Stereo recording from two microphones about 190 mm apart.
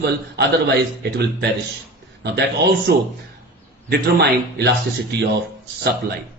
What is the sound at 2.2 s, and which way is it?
Speech, 60° right (ahead or behind).